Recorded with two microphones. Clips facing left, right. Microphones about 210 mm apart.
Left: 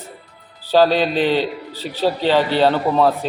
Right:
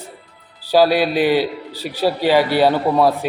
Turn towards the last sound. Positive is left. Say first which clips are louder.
# right 1 dB
turn(degrees=-10)  # may be behind; listen again after turning